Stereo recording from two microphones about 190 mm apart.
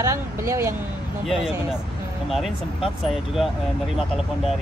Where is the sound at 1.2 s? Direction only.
5° right (ahead or behind).